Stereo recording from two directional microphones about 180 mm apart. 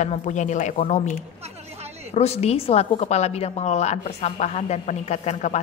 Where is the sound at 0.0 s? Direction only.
40° left (ahead or behind).